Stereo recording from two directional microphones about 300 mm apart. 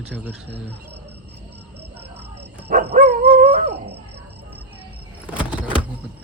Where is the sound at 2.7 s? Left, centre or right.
Right.